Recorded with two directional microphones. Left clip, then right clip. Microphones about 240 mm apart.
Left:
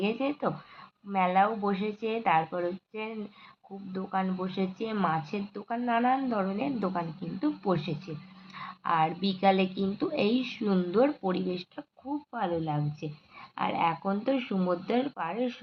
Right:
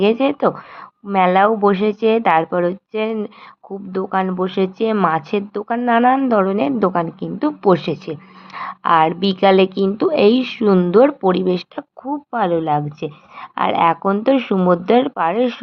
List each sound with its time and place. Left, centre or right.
0.0 s speech: right